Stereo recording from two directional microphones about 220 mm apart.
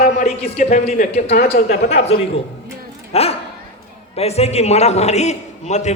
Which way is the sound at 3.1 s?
25° left (ahead or behind).